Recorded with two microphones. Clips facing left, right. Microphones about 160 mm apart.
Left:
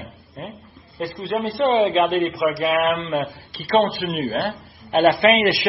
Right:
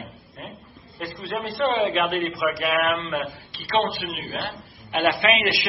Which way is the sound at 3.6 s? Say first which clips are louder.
Left 5 dB; 45° left (ahead or behind).